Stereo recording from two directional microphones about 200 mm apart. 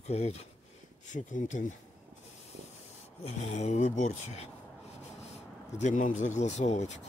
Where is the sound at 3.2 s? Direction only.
35° left (ahead or behind).